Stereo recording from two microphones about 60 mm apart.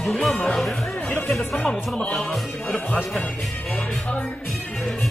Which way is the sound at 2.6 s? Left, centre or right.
Left.